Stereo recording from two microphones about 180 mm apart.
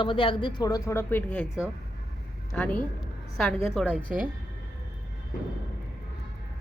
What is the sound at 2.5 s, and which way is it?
A woman's voice, 10° left (ahead or behind).